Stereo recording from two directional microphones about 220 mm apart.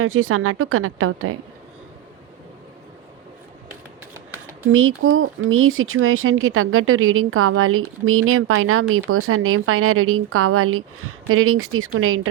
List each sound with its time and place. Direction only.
0.0 s speech: 70° right (ahead or behind)
4.7 s speech: 65° right (ahead or behind)